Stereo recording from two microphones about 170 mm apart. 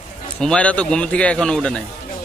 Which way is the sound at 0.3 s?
5° left (ahead or behind).